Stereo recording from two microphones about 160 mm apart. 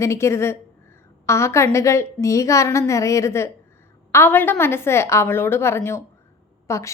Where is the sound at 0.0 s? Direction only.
15° left (ahead or behind).